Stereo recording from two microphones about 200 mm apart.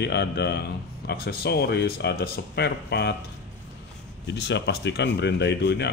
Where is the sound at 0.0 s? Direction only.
55° left (ahead or behind).